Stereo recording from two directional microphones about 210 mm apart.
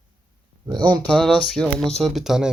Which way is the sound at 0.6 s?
20° right (ahead or behind).